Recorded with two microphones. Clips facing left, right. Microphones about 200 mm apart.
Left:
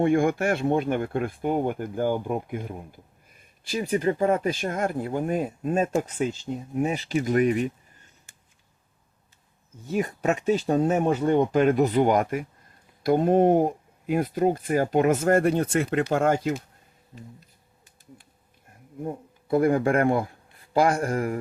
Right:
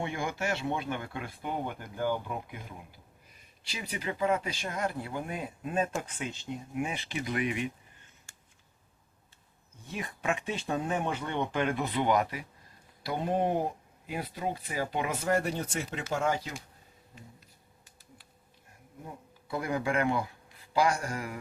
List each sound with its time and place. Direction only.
0.0 s speech: 50° left (ahead or behind)
9.8 s speech: 40° left (ahead or behind)
19.0 s speech: 50° left (ahead or behind)